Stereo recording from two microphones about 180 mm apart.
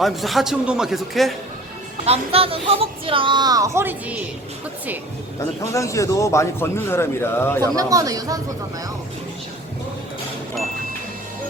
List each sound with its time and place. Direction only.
0.0 s a man's voice: centre (ahead or behind)
2.0 s speech: 30° right (ahead or behind); by 4.2 s 10° right (ahead or behind)
5.7 s a man's voice: 15° left (ahead or behind)
7.8 s speech: 20° right (ahead or behind)